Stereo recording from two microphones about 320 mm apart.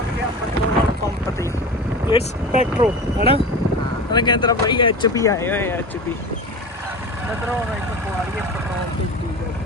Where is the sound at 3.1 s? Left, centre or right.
Centre.